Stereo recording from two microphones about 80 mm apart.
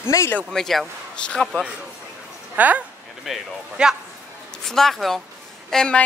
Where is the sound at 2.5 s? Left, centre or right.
Right.